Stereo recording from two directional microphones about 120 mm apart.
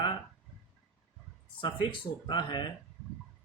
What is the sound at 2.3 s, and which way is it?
Speech, 40° left (ahead or behind).